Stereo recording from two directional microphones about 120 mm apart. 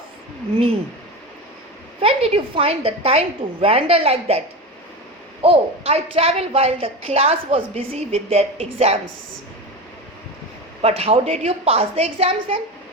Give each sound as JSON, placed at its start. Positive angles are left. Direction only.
{"t": 2.0, "sound": "a woman's voice", "side_deg": -55}
{"t": 5.4, "sound": "a woman's voice", "side_deg": -55}
{"t": 10.8, "sound": "a woman's voice", "side_deg": -55}